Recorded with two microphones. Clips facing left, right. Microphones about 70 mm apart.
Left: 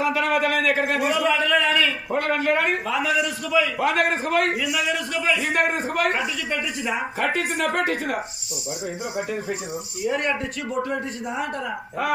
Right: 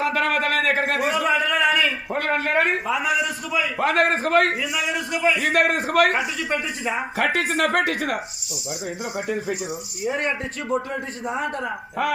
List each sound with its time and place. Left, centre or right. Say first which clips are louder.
0.0 s a sound: even; right
1.3 s a sound: even; centre
2.1 s a man's voice: left 3 dB; right
2.8 s a man's voice: even; centre
3.8 s a man's voice: right 1 dB; right
4.9 s a man's voice: right 1 dB; right
5.4 s a man's voice: right 2 dB; right
7.2 s speech: right 4 dB; right